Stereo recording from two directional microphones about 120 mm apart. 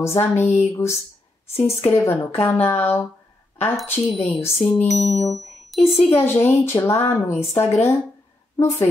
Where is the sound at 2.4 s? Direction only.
15° left (ahead or behind).